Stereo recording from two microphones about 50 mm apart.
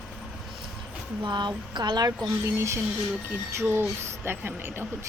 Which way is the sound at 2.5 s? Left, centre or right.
Right.